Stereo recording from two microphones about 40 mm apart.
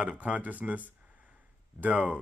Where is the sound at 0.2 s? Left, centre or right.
Right.